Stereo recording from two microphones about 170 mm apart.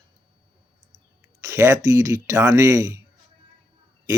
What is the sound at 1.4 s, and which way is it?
Speech, 15° right (ahead or behind).